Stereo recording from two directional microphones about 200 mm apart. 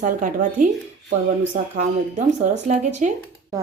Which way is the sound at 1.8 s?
35° right (ahead or behind).